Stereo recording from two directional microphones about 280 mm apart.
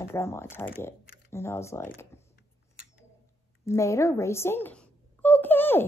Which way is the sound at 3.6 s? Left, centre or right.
Centre.